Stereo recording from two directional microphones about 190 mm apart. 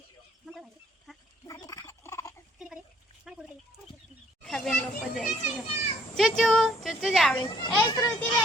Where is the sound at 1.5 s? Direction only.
20° left (ahead or behind).